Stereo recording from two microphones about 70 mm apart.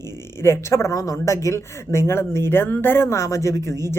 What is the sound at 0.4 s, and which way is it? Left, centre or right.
Speech, left.